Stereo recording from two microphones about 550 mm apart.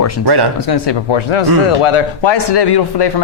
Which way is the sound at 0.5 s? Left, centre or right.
Left.